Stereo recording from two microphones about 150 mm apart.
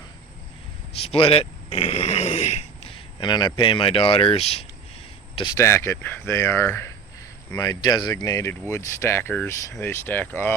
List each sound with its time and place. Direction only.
1.0 s speech: 40° left (ahead or behind)
5.5 s speech: 15° left (ahead or behind)